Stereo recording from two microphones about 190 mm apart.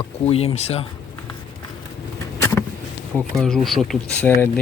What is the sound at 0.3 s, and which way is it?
Speech, 30° left (ahead or behind).